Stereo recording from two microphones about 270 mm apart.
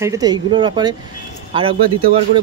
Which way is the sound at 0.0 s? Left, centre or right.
Centre.